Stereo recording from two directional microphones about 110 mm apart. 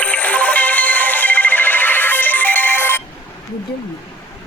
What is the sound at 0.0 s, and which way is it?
Music, 15° left (ahead or behind).